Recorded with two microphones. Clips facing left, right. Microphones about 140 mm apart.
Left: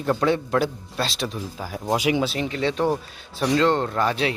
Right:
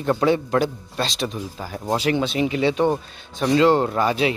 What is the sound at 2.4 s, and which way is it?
A man's voice, 5° right (ahead or behind).